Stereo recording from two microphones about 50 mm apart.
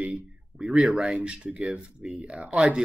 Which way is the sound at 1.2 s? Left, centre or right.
Right.